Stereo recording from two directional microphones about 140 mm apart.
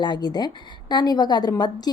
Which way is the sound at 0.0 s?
30° left (ahead or behind).